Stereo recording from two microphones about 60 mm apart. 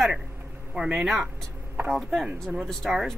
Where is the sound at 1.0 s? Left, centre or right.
Centre.